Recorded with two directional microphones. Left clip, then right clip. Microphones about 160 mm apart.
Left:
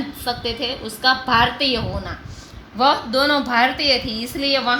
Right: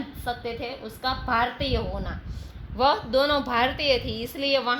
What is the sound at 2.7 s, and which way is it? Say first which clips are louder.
A woman's voice: left 5 dB; 55° right (ahead or behind).